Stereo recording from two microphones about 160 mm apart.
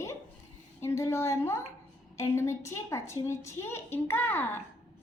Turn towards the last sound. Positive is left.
turn(degrees=15)  # may be behind; listen again after turning